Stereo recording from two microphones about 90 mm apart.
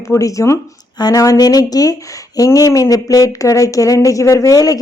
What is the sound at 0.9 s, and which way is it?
A woman's voice, 45° left (ahead or behind).